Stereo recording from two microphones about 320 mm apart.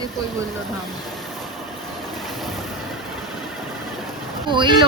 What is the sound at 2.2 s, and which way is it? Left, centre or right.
Boat, centre.